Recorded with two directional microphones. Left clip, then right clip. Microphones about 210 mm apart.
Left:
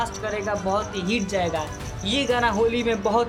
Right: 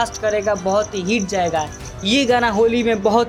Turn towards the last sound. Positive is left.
turn(degrees=-20)  # may be behind; listen again after turning